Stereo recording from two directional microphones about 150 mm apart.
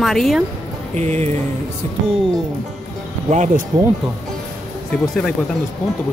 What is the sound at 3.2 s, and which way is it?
Speech, 50° right (ahead or behind).